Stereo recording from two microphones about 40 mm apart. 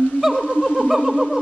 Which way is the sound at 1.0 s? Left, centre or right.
Right.